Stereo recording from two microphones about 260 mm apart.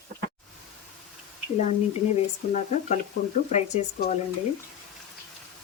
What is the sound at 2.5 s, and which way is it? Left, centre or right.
Speech, left.